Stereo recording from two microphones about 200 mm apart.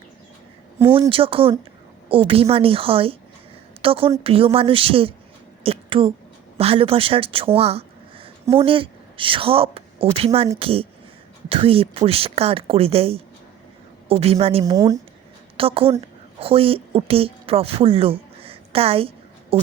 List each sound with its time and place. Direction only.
1.1 s a woman's voice: 25° right (ahead or behind)